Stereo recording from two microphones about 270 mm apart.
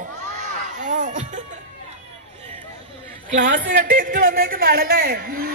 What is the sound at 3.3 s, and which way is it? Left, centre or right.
A man's voice, right.